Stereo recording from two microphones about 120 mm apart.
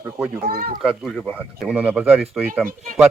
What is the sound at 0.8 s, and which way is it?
Speech, centre (ahead or behind).